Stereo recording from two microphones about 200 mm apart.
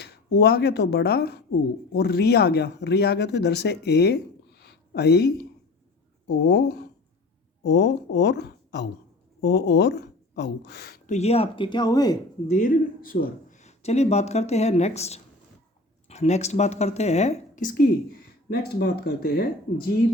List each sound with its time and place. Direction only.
0.0 s speech: 55° left (ahead or behind)
11.1 s speech: 30° left (ahead or behind)
12.5 s speech: 40° left (ahead or behind)